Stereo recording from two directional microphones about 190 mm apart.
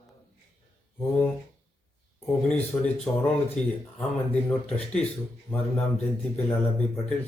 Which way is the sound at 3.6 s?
35° left (ahead or behind).